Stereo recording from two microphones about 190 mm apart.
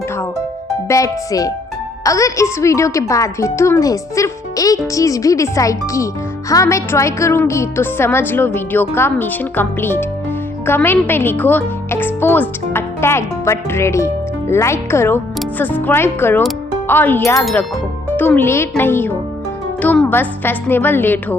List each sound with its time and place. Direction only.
0.9 s a woman's voice: 15° left (ahead or behind)